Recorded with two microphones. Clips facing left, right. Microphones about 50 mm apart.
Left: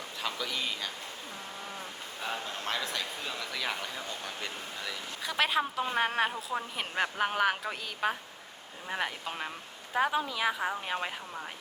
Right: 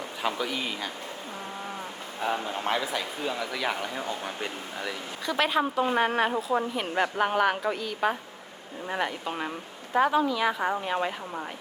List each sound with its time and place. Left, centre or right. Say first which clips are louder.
0.2 s speech: right 5 dB; right
2.2 s speech: right 7 dB; centre
5.2 s a woman's voice: right 4 dB; centre
6.3 s speech: right 8 dB; centre
6.7 s a woman's voice: right 5 dB; centre